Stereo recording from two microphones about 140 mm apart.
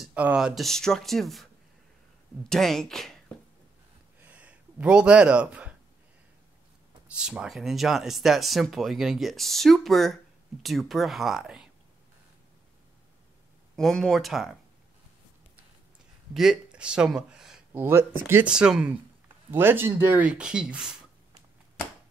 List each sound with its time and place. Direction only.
0.0 s speech: 10° right (ahead or behind)
2.5 s speech: 5° left (ahead or behind)
4.2 s a sound: 10° right (ahead or behind)
7.2 s speech: 5° right (ahead or behind)
13.7 s speech: 5° left (ahead or behind)
16.3 s speech: 5° right (ahead or behind)
17.7 s speech: 15° right (ahead or behind)